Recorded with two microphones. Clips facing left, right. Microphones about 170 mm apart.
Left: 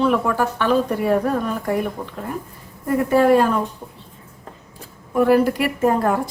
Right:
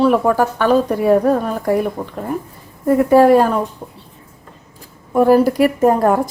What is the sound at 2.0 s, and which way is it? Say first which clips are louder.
A woman's voice: right 5 dB; 45° right (ahead or behind).